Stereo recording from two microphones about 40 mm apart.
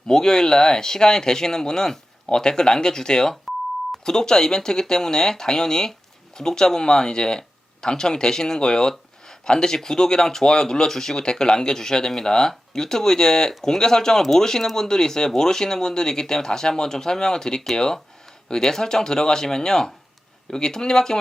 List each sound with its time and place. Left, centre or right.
0.1 s speech: centre